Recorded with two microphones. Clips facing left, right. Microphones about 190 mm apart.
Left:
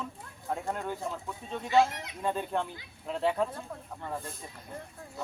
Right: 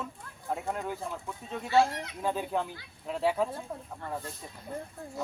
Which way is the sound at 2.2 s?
5° right (ahead or behind).